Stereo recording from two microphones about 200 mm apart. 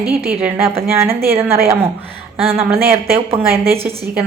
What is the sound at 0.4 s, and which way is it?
Speech, 10° right (ahead or behind).